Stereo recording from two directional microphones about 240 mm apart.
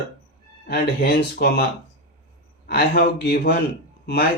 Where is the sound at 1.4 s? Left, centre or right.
Left.